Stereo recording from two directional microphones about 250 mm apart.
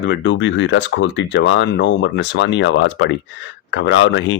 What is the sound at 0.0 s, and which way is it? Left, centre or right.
Speech, left.